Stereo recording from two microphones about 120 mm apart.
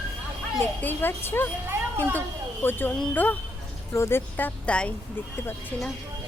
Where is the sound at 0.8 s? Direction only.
15° left (ahead or behind).